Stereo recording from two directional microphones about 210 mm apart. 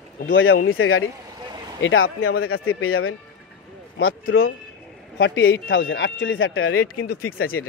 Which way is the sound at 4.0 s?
75° left (ahead or behind).